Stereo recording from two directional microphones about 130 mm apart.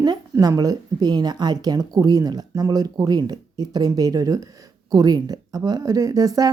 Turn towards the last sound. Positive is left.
turn(degrees=-25)  # may be behind; listen again after turning